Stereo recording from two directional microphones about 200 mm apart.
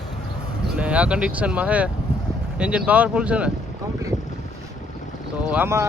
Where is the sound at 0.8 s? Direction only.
5° right (ahead or behind).